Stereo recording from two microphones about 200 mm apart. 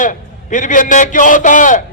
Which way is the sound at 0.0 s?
40° left (ahead or behind).